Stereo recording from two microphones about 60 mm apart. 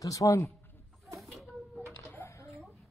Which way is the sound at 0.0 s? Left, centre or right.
Left.